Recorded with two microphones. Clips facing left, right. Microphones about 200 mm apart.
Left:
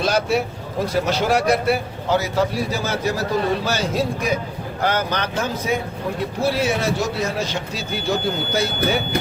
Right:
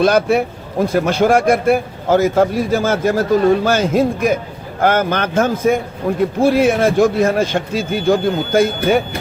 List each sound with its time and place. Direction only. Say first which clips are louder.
0.0 s a man's voice: right 7 dB; 55° right (ahead or behind)